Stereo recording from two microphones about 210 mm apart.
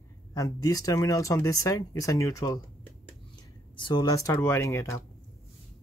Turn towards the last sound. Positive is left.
turn(degrees=15)  # may be behind; listen again after turning